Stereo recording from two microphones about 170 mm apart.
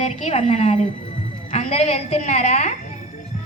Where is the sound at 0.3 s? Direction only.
40° left (ahead or behind).